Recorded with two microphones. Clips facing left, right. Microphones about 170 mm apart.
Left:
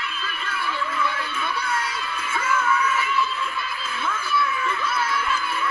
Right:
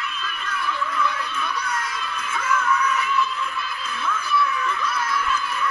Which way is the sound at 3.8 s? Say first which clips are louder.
Right 2 dB; 25° left (ahead or behind).